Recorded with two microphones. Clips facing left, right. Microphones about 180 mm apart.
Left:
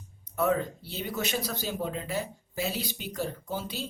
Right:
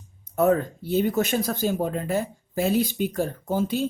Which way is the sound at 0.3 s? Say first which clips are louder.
Right 6 dB; 45° right (ahead or behind).